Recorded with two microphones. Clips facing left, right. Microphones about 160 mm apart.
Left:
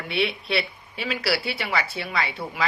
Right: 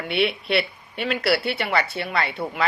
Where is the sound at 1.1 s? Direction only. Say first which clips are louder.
Right 4 dB; 60° right (ahead or behind).